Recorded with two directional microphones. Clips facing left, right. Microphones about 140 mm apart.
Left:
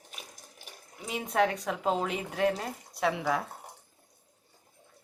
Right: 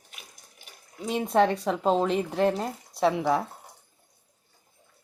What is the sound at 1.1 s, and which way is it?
A woman's voice, 30° right (ahead or behind).